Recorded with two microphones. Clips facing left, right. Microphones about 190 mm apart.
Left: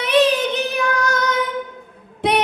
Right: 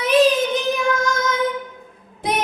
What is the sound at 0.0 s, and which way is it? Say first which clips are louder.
Child singing: right 1 dB; 65° left (ahead or behind).